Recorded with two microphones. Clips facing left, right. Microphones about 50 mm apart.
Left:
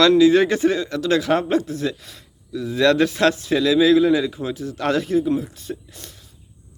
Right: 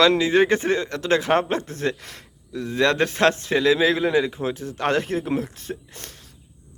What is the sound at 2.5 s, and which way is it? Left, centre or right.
Speech, right.